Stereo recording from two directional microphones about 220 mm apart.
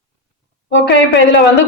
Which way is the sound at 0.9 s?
55° left (ahead or behind).